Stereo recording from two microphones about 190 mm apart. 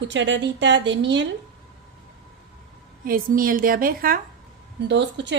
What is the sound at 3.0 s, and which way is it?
A woman's voice, 50° right (ahead or behind).